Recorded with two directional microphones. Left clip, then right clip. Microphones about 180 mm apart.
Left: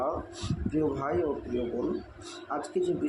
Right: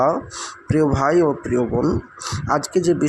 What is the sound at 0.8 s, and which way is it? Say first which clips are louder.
Speech: right 12 dB; 50° right (ahead or behind).